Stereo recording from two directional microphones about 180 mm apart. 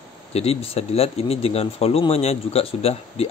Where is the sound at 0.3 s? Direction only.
35° left (ahead or behind).